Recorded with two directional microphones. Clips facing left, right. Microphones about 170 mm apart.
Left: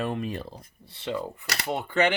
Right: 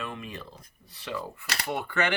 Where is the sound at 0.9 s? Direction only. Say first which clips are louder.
Left 4 dB; 25° left (ahead or behind).